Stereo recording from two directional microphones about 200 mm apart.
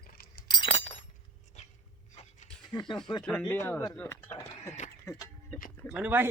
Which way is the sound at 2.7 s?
25° left (ahead or behind).